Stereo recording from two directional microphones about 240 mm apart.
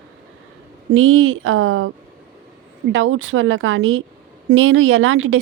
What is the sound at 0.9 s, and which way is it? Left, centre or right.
Speech, right.